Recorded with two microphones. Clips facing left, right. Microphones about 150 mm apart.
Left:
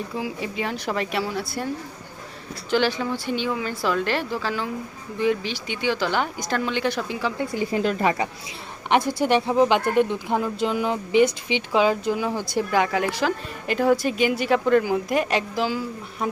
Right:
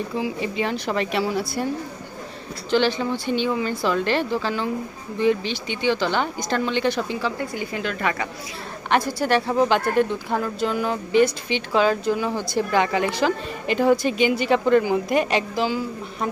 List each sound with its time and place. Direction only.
0.2 s a woman's voice: 5° left (ahead or behind)
2.6 s a woman's voice: 5° left (ahead or behind)
7.5 s a woman's voice: 35° left (ahead or behind)
8.9 s a woman's voice: 20° left (ahead or behind); by 15.8 s centre (ahead or behind)